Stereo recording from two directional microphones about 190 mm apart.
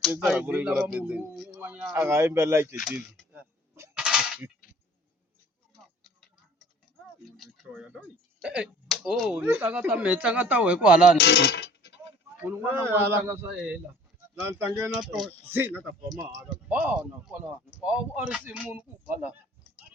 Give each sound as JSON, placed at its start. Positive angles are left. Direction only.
{"t": 0.0, "sound": "speech", "side_deg": 0}
{"t": 2.8, "sound": "cap gun", "side_deg": -5}
{"t": 7.3, "sound": "speech", "side_deg": 0}
{"t": 11.2, "sound": "speech", "side_deg": 60}
{"t": 12.4, "sound": "speech", "side_deg": -10}
{"t": 16.0, "sound": "speech", "side_deg": -20}
{"t": 16.4, "sound": "speech", "side_deg": -5}